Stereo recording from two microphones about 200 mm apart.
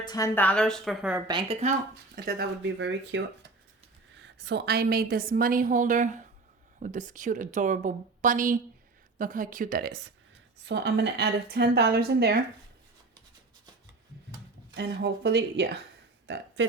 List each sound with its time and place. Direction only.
0.0 s a woman's voice: 20° left (ahead or behind)
0.3 s speech: 5° left (ahead or behind)
1.3 s speech: 25° right (ahead or behind)
2.1 s a woman's voice: 50° right (ahead or behind)
4.2 s a woman's voice: 60° right (ahead or behind)
14.8 s a woman's voice: 55° right (ahead or behind)